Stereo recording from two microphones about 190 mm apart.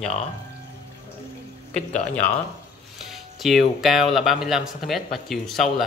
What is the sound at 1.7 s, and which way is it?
Speech, 35° left (ahead or behind).